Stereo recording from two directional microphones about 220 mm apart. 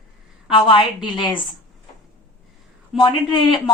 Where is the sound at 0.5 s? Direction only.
20° left (ahead or behind).